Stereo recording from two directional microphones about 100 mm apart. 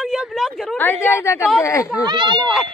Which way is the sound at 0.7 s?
20° left (ahead or behind).